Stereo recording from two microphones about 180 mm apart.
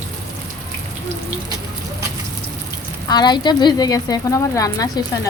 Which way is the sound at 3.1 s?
25° left (ahead or behind).